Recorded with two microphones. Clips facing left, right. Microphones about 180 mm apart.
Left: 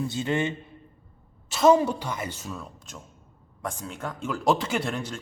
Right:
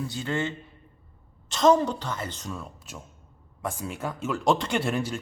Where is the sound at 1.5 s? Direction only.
5° left (ahead or behind).